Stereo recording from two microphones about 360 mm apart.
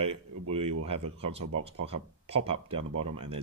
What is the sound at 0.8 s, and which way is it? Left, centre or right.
Speech, centre.